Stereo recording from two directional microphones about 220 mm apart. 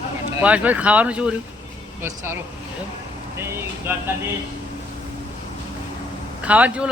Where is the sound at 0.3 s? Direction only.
5° right (ahead or behind).